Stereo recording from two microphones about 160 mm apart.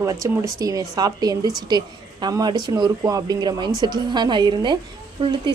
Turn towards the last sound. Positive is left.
turn(degrees=-30)  # may be behind; listen again after turning